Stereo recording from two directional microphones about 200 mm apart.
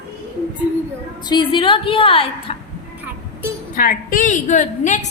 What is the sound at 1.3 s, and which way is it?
A woman's voice, 25° left (ahead or behind).